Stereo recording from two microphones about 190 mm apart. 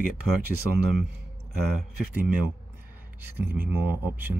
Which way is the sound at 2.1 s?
10° right (ahead or behind).